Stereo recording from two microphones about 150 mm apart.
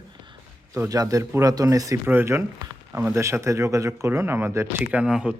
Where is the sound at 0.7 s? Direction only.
25° right (ahead or behind); by 5.3 s 5° right (ahead or behind).